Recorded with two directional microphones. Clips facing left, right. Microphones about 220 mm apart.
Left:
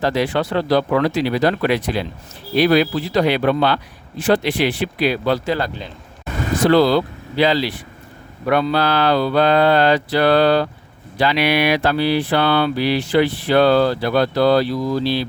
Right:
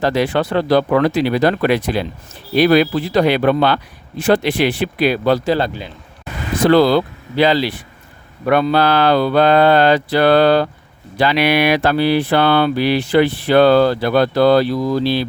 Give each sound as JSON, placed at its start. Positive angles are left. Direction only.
{"t": 0.0, "sound": "mantra", "side_deg": -55}
{"t": 5.5, "sound": "a man's voice", "side_deg": -30}
{"t": 6.7, "sound": "mantra", "side_deg": -55}